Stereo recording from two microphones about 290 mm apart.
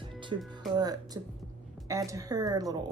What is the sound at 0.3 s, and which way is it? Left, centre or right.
Speech, centre.